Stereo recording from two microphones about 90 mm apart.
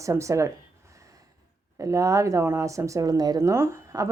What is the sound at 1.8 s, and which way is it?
Speech, 35° right (ahead or behind).